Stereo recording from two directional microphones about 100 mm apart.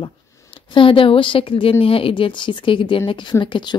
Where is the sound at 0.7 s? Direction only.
60° left (ahead or behind).